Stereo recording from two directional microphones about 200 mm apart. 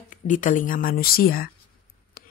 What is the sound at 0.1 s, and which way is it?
Speech, 40° left (ahead or behind).